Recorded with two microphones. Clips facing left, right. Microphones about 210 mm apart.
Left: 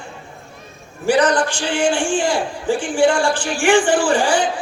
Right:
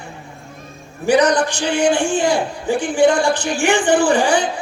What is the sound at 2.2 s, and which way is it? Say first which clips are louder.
Speech: right 2 dB; 60° right (ahead or behind).